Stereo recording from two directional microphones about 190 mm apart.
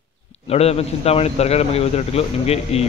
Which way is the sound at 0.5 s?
35° left (ahead or behind).